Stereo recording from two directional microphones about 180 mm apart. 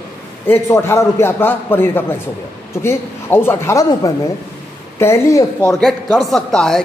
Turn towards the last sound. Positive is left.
turn(degrees=5)  # may be behind; listen again after turning